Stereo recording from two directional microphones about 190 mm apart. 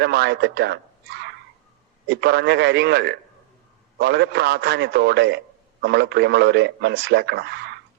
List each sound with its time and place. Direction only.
0.0 s speech: 60° right (ahead or behind)